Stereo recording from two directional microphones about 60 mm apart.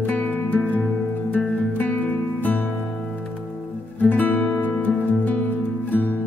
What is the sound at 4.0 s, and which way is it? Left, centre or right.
Music, left.